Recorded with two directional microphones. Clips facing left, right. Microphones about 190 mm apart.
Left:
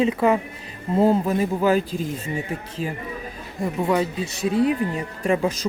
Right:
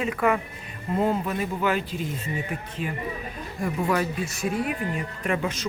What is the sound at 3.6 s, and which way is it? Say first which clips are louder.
Speech: left 3 dB; 25° left (ahead or behind).